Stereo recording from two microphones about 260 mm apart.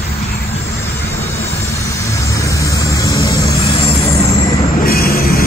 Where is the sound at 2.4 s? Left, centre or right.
Centre.